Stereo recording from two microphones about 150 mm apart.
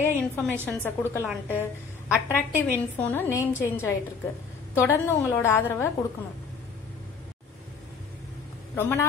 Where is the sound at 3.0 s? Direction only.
10° left (ahead or behind).